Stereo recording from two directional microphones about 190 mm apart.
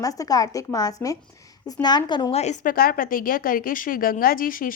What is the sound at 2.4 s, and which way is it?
A woman's voice, 40° left (ahead or behind).